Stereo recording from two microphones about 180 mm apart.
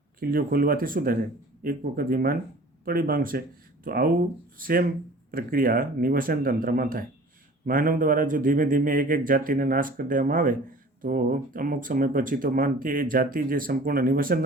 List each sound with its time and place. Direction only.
0.2 s speech: 55° right (ahead or behind)